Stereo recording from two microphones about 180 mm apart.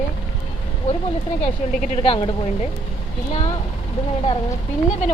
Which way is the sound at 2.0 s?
30° left (ahead or behind).